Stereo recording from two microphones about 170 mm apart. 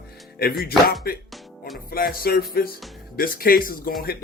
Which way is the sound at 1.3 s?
Centre (ahead or behind).